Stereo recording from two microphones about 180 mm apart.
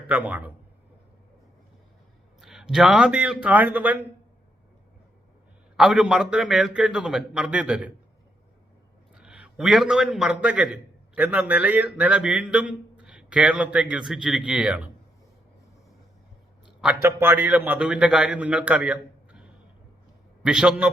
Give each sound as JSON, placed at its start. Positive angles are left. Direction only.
{"t": 0.1, "sound": "a man's voice", "side_deg": -10}
{"t": 2.4, "sound": "a man's voice", "side_deg": 0}
{"t": 5.7, "sound": "a man's voice", "side_deg": 0}
{"t": 9.1, "sound": "a man's voice", "side_deg": -5}
{"t": 16.8, "sound": "a man's voice", "side_deg": -10}